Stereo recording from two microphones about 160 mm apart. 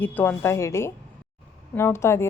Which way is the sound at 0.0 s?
10° left (ahead or behind).